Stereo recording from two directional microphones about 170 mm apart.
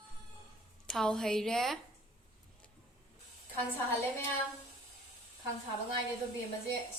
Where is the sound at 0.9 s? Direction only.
Centre (ahead or behind).